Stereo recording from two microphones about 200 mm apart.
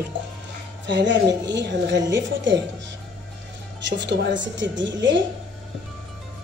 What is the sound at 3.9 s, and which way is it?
A woman's voice, 60° right (ahead or behind).